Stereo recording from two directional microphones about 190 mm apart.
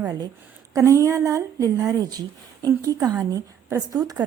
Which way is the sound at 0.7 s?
15° right (ahead or behind).